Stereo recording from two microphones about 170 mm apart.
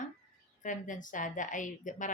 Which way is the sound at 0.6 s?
50° left (ahead or behind).